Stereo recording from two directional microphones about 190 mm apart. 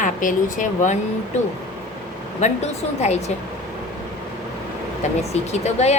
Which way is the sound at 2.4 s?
35° left (ahead or behind).